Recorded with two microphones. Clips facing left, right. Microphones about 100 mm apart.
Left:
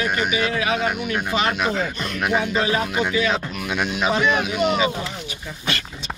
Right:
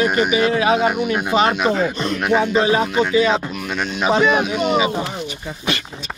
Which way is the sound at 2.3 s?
25° right (ahead or behind).